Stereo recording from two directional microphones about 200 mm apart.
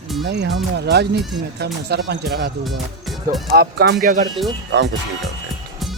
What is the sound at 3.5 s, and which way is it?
Music, 50° right (ahead or behind).